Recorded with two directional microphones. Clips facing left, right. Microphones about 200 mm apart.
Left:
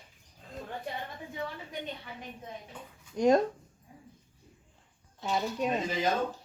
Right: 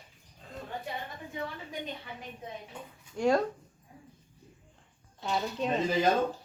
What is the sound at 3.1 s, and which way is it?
Speech, 20° left (ahead or behind).